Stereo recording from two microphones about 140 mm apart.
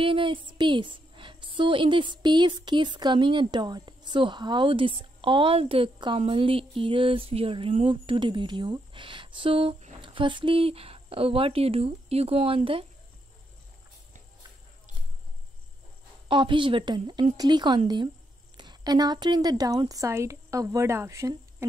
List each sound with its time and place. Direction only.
0.0 s a woman's voice: 40° right (ahead or behind)
16.3 s a woman's voice: 35° right (ahead or behind)